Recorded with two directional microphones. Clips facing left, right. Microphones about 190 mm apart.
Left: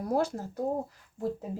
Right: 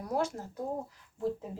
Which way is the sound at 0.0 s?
30° left (ahead or behind).